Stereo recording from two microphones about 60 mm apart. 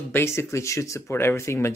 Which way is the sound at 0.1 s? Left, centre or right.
Left.